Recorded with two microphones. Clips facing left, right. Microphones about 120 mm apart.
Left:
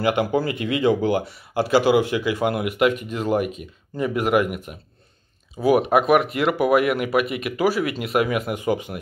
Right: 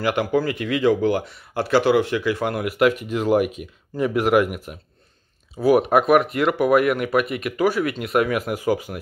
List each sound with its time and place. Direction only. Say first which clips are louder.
0.0 s speech: even; 5° left (ahead or behind)
5.6 s speech: right 1 dB; centre (ahead or behind)